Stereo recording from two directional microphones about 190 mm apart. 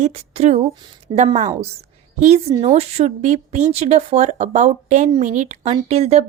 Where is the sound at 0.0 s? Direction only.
35° right (ahead or behind).